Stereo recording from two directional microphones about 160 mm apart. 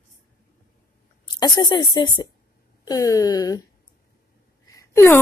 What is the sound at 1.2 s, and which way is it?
A woman's voice, 25° left (ahead or behind).